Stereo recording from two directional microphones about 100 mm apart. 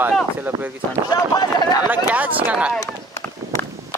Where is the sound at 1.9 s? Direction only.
15° right (ahead or behind).